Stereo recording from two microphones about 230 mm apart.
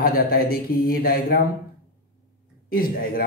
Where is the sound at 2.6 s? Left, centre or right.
Left.